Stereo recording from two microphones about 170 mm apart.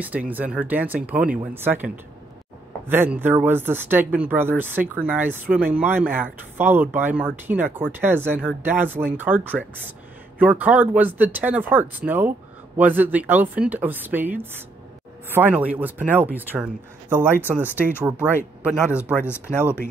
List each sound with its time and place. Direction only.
0.3 s speech: 10° right (ahead or behind)
2.9 s speech: 10° right (ahead or behind)
19.1 s speech: 15° left (ahead or behind)